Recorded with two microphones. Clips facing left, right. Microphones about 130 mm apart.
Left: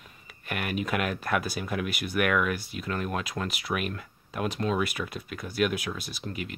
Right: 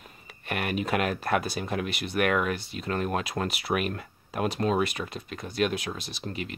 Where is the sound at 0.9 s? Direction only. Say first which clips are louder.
Right 3 dB; 40° right (ahead or behind).